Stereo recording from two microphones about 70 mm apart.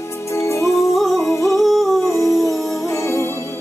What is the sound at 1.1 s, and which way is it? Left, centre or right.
Yodeling, left.